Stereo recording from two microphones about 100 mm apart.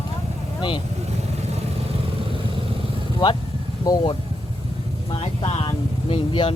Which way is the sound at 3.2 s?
45° left (ahead or behind).